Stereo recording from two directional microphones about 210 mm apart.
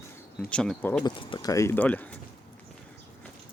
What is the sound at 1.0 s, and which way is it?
Speech, 20° left (ahead or behind).